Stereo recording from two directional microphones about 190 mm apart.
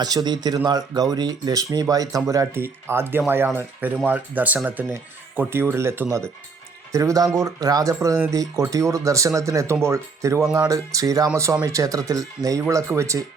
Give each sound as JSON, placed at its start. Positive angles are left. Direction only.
{"t": 0.0, "sound": "speech", "side_deg": -20}